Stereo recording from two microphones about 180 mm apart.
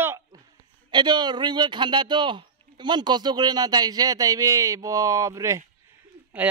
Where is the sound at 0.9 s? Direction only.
25° right (ahead or behind).